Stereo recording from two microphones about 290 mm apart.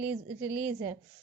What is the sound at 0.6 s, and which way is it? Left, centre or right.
Speech, centre.